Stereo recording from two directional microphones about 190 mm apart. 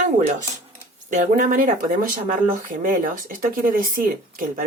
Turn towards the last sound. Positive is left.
turn(degrees=-45)  # may be behind; listen again after turning